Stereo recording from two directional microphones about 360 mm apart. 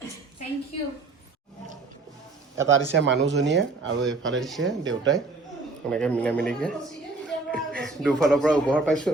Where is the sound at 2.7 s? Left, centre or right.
Right.